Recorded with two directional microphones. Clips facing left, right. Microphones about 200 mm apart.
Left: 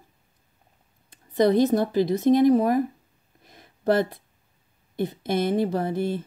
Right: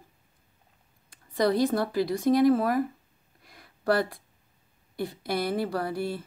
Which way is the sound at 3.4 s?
20° left (ahead or behind).